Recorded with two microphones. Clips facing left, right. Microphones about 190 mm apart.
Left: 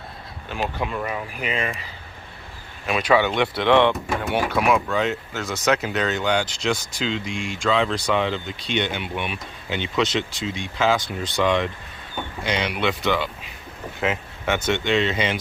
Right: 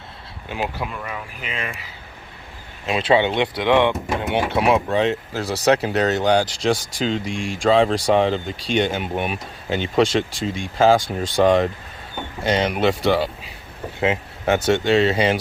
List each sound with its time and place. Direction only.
0.4 s speech: 15° right (ahead or behind)
1.4 s speech: centre (ahead or behind)
2.8 s speech: 25° right (ahead or behind)